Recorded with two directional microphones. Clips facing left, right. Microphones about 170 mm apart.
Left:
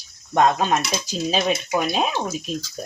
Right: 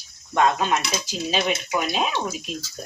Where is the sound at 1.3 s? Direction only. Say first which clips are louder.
Left 2 dB; 35° left (ahead or behind).